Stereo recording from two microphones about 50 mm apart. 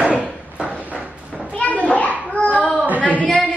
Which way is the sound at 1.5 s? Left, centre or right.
Left.